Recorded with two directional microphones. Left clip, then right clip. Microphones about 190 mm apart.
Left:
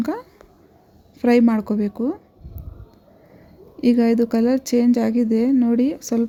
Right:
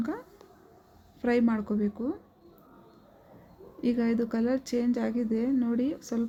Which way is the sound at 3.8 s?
30° left (ahead or behind).